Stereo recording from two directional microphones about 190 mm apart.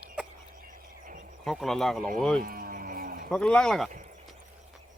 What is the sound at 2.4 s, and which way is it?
Livestock, 50° right (ahead or behind).